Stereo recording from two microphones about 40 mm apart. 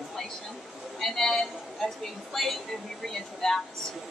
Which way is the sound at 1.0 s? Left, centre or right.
Centre.